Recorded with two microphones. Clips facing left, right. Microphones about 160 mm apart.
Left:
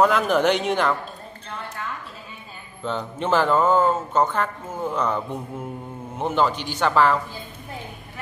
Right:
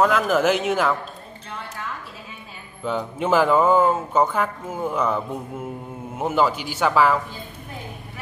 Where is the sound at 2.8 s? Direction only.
10° right (ahead or behind).